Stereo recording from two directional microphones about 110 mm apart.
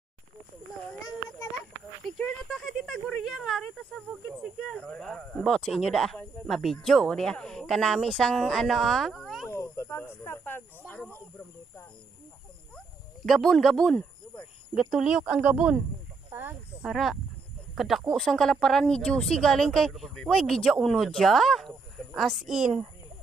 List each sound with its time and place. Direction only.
2.0 s speech: 5° left (ahead or behind)
9.5 s speech: 25° left (ahead or behind)
12.7 s a sound: 5° left (ahead or behind)
14.9 s a woman's voice: 5° right (ahead or behind)
16.3 s snake: 20° right (ahead or behind)
16.8 s a woman's voice: centre (ahead or behind)